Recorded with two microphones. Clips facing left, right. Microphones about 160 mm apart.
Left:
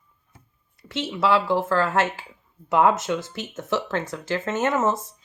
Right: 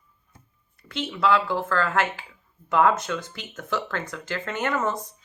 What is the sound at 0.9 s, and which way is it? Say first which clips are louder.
Speech: left 1 dB; 25° left (ahead or behind).